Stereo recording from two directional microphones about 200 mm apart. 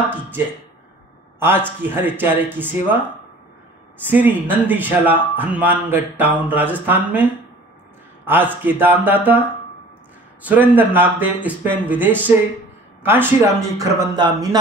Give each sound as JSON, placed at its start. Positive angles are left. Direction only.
{"t": 1.8, "sound": "speech", "side_deg": -10}
{"t": 4.1, "sound": "speech", "side_deg": -10}
{"t": 8.3, "sound": "speech", "side_deg": -10}
{"t": 10.4, "sound": "speech", "side_deg": -10}